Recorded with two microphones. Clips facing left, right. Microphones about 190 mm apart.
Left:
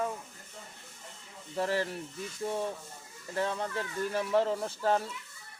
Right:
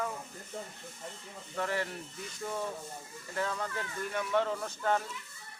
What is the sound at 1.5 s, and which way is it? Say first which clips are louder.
Speech: left 3 dB; 30° left (ahead or behind).